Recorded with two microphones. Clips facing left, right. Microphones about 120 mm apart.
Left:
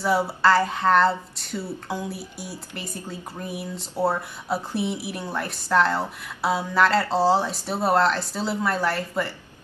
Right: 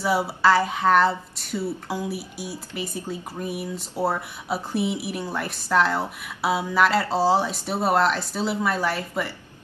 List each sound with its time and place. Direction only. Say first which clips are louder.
0.0 s a woman's voice: even; centre (ahead or behind)